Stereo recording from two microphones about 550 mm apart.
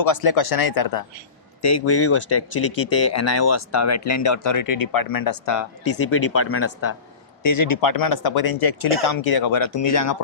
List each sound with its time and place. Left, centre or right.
0.0 s speech: left
1.6 s speech: left
7.4 s speech: left